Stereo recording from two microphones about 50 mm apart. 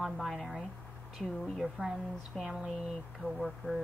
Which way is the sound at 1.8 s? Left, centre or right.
Right.